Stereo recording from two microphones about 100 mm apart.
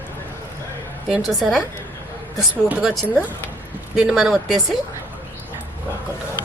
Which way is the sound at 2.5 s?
15° right (ahead or behind).